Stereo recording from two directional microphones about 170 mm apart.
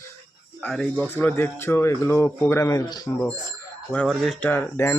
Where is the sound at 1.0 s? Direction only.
10° right (ahead or behind).